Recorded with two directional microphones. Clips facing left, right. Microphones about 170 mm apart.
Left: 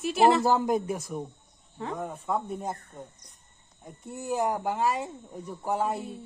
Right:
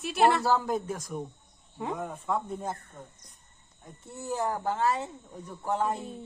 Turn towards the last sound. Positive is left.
turn(degrees=10)  # may be behind; listen again after turning